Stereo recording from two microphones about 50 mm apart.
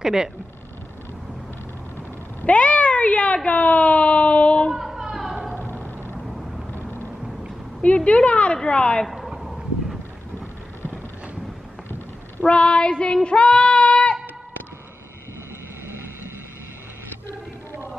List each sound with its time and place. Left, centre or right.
0.0 s speech: centre
2.4 s speech: left
4.6 s a sound: centre
6.1 s vehicle: centre
6.7 s vehicle: left
7.8 s speech: left
9.0 s a sound: centre
12.4 s child singing: centre